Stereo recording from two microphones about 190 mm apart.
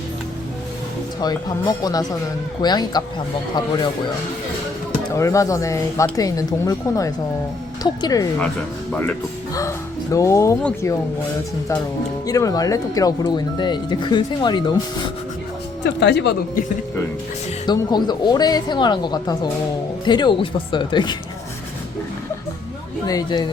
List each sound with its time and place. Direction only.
1.2 s speech: 20° left (ahead or behind)
5.1 s speech: 15° left (ahead or behind)
8.9 s speech: 10° left (ahead or behind)
12.2 s speech: 20° left (ahead or behind)
15.8 s speech: 65° left (ahead or behind)
17.7 s speech: 20° left (ahead or behind)
23.0 s speech: 20° left (ahead or behind)